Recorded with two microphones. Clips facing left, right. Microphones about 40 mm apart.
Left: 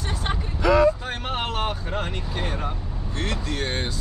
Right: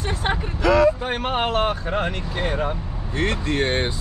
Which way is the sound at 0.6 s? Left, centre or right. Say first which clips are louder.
Right 1 dB; right.